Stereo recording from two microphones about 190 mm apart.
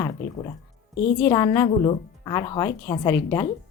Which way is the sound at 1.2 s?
20° left (ahead or behind).